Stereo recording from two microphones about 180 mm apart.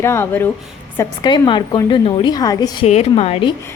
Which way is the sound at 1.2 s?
25° left (ahead or behind).